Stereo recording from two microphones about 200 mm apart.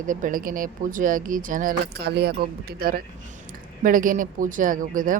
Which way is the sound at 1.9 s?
55° right (ahead or behind).